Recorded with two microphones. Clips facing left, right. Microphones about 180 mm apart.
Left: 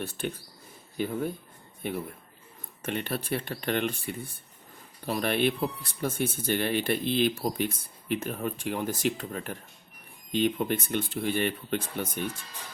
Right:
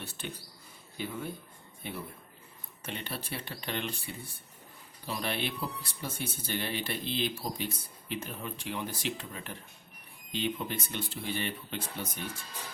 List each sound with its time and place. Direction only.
0.0 s speech: 50° left (ahead or behind)